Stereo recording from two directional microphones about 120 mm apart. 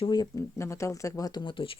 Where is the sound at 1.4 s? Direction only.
45° left (ahead or behind).